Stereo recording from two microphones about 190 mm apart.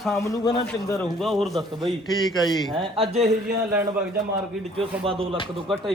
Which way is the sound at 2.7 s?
30° right (ahead or behind).